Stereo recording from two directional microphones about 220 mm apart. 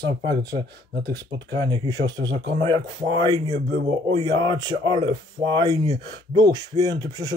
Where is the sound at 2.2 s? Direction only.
55° right (ahead or behind).